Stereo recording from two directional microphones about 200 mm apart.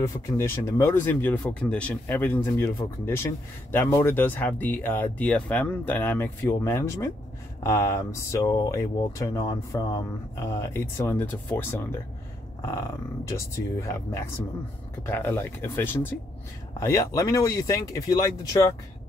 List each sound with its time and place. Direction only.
0.0 s speech: 15° left (ahead or behind)